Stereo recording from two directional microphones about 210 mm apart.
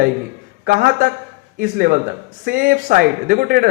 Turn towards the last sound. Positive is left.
turn(degrees=-45)  # may be behind; listen again after turning